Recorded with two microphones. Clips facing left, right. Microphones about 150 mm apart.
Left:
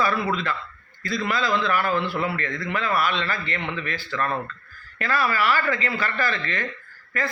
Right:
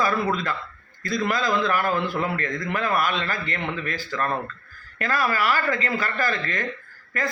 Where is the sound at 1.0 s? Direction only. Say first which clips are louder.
Right 1 dB; 45° right (ahead or behind).